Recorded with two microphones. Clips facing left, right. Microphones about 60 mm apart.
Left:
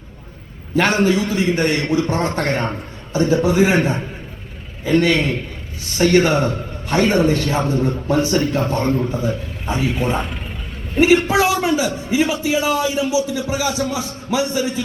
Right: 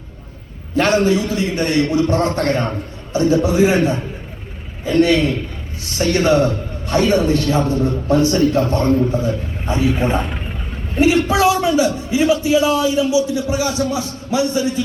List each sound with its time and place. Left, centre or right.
0.9 s a man's voice: left
10.9 s a man's voice: left